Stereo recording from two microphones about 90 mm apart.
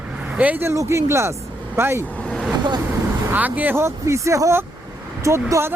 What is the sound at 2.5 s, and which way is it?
Vehicle, 55° right (ahead or behind).